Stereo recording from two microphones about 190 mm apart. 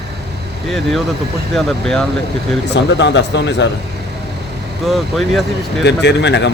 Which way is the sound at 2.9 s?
70° left (ahead or behind).